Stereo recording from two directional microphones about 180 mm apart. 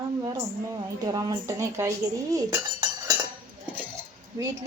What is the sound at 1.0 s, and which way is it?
Speech, 20° right (ahead or behind).